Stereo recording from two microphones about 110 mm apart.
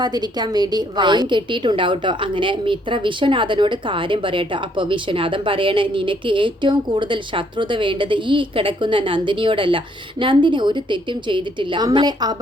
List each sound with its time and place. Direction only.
0.0 s a woman's voice: 40° right (ahead or behind)
11.9 s a woman's voice: 35° right (ahead or behind)